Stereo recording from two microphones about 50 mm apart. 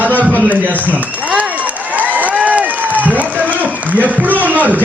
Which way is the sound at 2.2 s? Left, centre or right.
Right.